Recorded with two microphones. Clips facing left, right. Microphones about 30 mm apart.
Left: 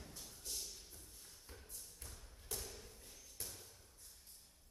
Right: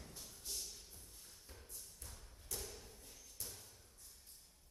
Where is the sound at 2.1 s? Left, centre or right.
Centre.